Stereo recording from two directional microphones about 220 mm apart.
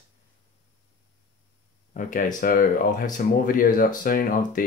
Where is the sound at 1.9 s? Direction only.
40° left (ahead or behind).